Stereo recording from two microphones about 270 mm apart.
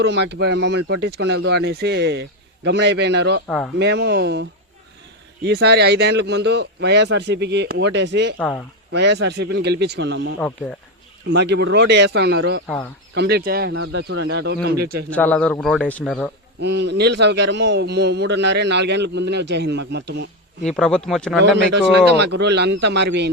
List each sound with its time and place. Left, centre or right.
0.0 s a man's voice: right
3.4 s speech: centre
3.8 s a man's voice: right
5.5 s a man's voice: right
8.4 s speech: centre
8.9 s a man's voice: right
12.6 s speech: centre
13.1 s a man's voice: right
13.7 s a man's voice: right
15.1 s speech: centre
16.6 s a man's voice: right
20.7 s speech: centre
21.4 s a man's voice: right